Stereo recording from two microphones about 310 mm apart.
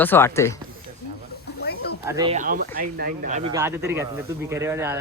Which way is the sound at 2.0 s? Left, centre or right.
Centre.